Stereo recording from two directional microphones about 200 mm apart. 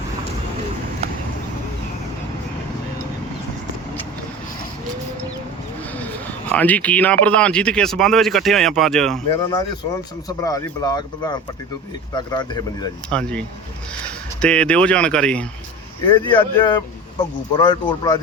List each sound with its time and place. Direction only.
6.5 s speech: 5° left (ahead or behind)
9.3 s speech: 20° left (ahead or behind)
13.1 s speech: 5° left (ahead or behind)
14.4 s speech: 5° left (ahead or behind)
16.0 s speech: 25° left (ahead or behind)